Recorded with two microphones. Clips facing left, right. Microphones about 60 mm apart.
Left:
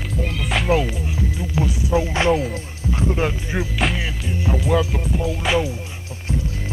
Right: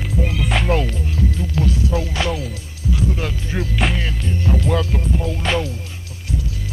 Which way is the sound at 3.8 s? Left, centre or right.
Centre.